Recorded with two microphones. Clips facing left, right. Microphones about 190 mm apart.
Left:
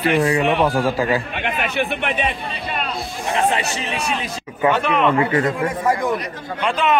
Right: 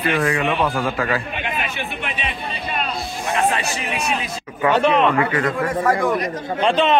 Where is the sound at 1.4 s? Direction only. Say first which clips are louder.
Left 4 dB; 65° left (ahead or behind).